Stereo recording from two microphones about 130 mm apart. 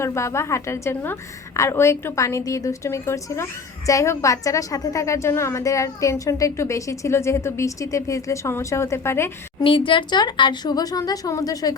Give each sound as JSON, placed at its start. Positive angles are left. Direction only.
{"t": 0.0, "sound": "a woman's voice", "side_deg": 20}
{"t": 9.6, "sound": "speech", "side_deg": 40}